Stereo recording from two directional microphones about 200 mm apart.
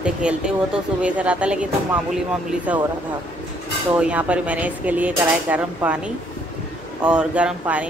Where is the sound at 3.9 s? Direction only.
5° right (ahead or behind).